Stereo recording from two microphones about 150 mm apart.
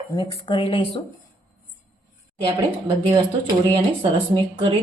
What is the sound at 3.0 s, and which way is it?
Speech, 40° right (ahead or behind).